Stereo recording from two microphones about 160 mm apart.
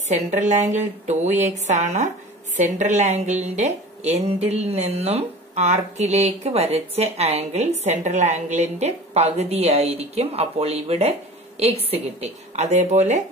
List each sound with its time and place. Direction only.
0.3 s a woman's voice: 45° right (ahead or behind)